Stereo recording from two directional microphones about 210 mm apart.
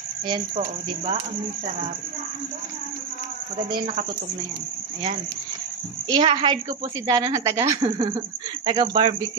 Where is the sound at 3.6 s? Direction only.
25° right (ahead or behind).